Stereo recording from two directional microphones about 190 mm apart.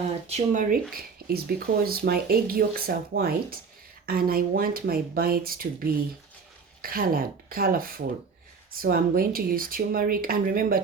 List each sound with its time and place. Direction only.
0.3 s speech: 40° right (ahead or behind)
6.8 s speech: 50° right (ahead or behind)